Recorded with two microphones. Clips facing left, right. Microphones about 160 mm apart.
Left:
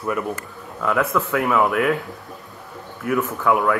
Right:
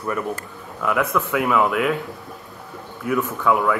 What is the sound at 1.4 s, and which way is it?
Speech, 15° left (ahead or behind).